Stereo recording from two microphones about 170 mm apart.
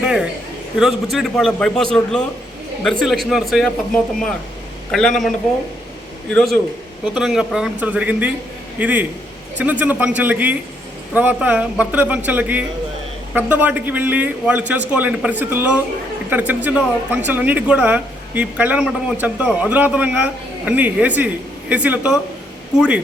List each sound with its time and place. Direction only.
0.0 s a man's voice: 5° right (ahead or behind)
6.3 s a man's voice: centre (ahead or behind)